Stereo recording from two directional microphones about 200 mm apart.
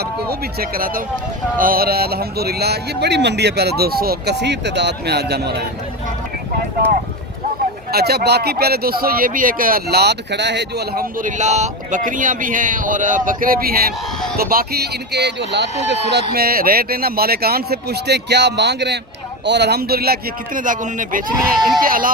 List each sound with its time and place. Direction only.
0.0 s a man's voice: 50° right (ahead or behind)
6.8 s speech: 10° left (ahead or behind)
7.9 s a man's voice: 55° right (ahead or behind)
16.3 s a man's voice: 50° right (ahead or behind)